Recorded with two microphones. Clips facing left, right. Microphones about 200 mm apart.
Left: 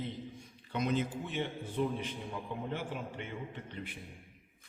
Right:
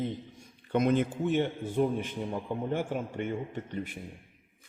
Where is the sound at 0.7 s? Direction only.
55° right (ahead or behind).